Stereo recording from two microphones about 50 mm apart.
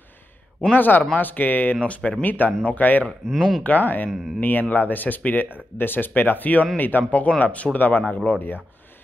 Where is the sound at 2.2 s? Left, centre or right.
Left.